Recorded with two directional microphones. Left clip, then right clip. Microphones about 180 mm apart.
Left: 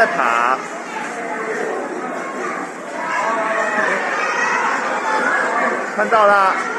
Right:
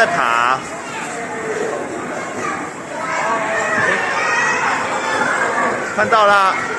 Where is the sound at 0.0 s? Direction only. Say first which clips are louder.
Right 1 dB; 15° right (ahead or behind).